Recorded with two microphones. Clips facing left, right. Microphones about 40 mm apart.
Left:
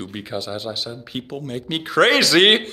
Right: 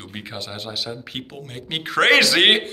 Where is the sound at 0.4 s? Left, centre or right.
Right.